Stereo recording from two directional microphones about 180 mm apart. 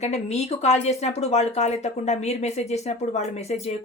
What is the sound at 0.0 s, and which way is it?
Speech, 35° left (ahead or behind).